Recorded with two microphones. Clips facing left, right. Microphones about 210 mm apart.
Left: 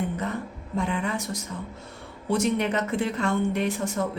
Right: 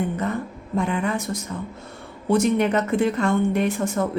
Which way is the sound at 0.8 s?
50° right (ahead or behind).